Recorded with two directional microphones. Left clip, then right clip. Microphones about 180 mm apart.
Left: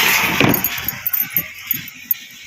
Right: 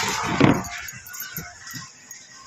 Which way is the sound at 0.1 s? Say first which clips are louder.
Left 8 dB; 20° left (ahead or behind).